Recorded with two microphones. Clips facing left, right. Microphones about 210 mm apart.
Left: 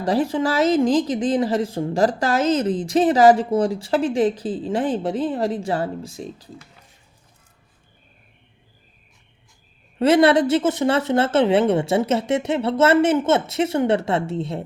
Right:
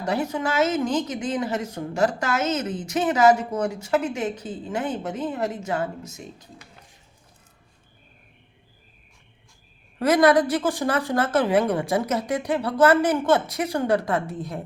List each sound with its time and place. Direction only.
0.0 s a woman's voice: 35° left (ahead or behind)
10.0 s speech: 25° left (ahead or behind)